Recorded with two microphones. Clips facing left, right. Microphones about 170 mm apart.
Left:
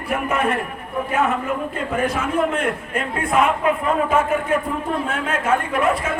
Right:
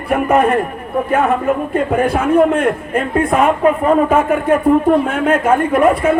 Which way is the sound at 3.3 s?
40° right (ahead or behind).